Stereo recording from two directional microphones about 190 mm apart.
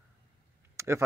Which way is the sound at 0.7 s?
15° right (ahead or behind).